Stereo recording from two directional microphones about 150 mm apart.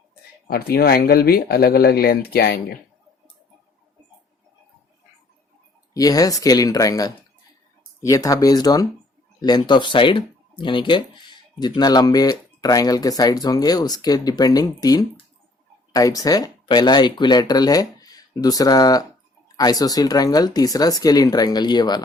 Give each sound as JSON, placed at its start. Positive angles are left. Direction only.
{"t": 0.5, "sound": "speech", "side_deg": 90}
{"t": 5.9, "sound": "speech", "side_deg": 25}